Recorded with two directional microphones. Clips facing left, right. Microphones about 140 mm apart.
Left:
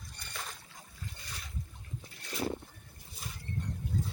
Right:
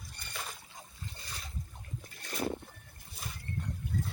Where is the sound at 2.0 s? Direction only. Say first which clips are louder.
Even; 50° right (ahead or behind).